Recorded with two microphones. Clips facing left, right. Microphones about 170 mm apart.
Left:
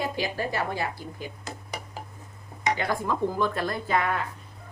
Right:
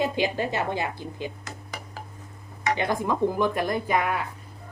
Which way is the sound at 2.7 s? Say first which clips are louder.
Right 3 dB; 20° right (ahead or behind).